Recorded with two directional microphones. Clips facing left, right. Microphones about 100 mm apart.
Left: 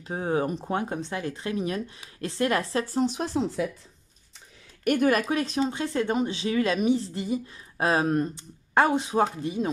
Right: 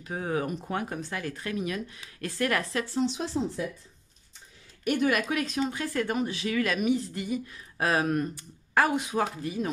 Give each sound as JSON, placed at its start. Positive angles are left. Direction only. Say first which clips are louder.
{"t": 0.0, "sound": "speech", "louder": "left 4 dB", "side_deg": 30}
{"t": 3.6, "sound": "speech", "louder": "left 4 dB", "side_deg": 90}
{"t": 4.8, "sound": "speech", "louder": "left 3 dB", "side_deg": 55}
{"t": 5.1, "sound": "speech", "louder": "left 3 dB", "side_deg": 35}